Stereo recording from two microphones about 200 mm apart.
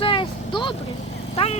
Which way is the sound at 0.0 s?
25° left (ahead or behind).